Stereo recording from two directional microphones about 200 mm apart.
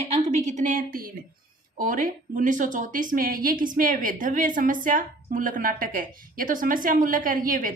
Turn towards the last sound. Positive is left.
turn(degrees=-45)  # may be behind; listen again after turning